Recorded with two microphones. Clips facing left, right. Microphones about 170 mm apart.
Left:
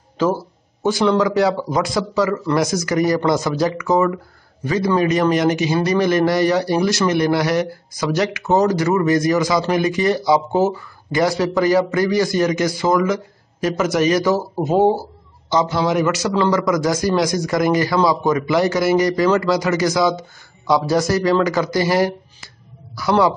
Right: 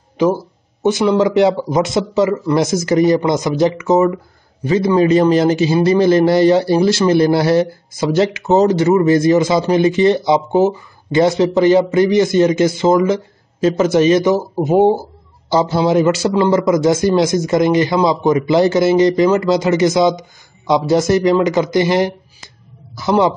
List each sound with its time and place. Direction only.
0.2 s a man's voice: 15° right (ahead or behind)
15.5 s a man's voice: 30° right (ahead or behind)